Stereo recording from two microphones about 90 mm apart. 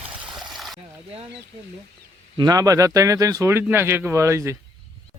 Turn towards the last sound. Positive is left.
turn(degrees=-35)  # may be behind; listen again after turning